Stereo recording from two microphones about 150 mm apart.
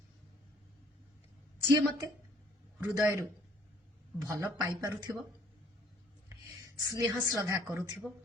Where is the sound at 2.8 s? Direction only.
20° right (ahead or behind).